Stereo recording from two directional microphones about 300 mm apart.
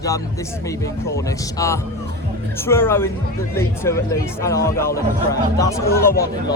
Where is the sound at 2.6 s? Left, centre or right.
Centre.